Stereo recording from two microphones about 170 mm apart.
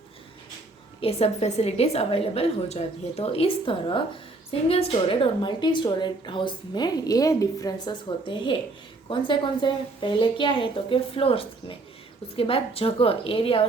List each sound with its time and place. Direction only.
1.0 s a woman's voice: 40° left (ahead or behind)